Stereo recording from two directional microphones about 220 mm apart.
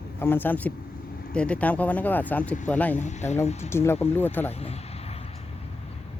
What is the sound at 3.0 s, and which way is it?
Speech, 30° left (ahead or behind).